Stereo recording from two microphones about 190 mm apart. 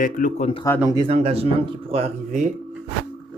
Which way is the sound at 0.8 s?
20° right (ahead or behind).